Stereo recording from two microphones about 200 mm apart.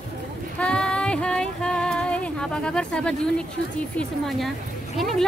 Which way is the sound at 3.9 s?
Centre (ahead or behind).